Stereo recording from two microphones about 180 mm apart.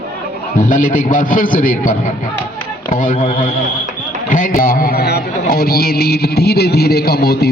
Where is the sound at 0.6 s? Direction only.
45° left (ahead or behind).